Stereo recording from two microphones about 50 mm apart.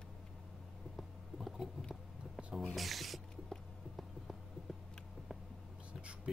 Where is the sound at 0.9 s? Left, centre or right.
Centre.